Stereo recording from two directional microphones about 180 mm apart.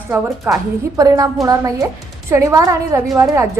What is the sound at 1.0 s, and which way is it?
A woman's voice, 20° right (ahead or behind).